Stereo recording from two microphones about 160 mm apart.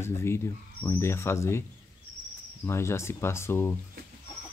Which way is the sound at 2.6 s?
15° left (ahead or behind).